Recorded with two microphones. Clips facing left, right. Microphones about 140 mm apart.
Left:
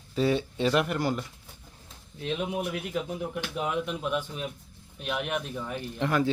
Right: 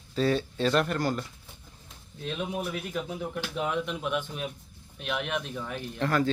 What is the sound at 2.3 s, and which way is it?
Speech, 20° left (ahead or behind).